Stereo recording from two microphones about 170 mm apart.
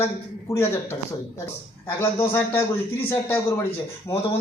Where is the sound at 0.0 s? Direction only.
15° left (ahead or behind).